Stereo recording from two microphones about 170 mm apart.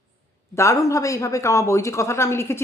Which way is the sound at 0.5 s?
15° left (ahead or behind).